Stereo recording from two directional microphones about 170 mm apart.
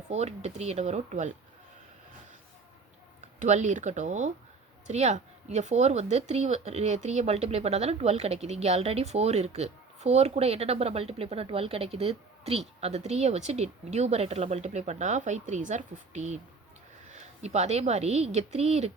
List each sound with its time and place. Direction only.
0.1 s speech: 40° right (ahead or behind)
3.4 s speech: 45° right (ahead or behind)